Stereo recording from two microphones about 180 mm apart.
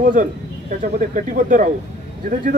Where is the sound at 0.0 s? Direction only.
45° right (ahead or behind).